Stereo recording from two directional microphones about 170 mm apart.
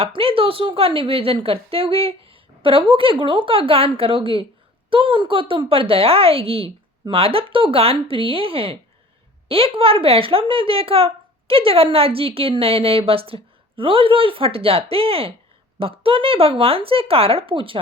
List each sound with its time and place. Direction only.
0.0 s speech: 35° right (ahead or behind)